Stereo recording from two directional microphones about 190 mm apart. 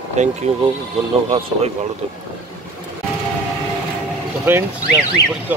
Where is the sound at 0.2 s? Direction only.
35° right (ahead or behind).